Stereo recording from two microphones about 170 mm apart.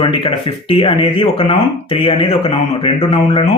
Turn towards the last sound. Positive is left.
turn(degrees=35)  # may be behind; listen again after turning